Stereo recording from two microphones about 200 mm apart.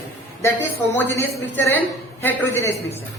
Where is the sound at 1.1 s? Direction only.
15° left (ahead or behind).